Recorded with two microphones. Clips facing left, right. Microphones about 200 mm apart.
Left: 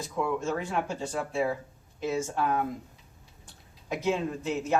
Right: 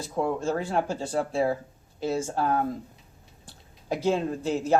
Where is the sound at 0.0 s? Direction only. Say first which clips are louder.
Right 3 dB; 35° right (ahead or behind).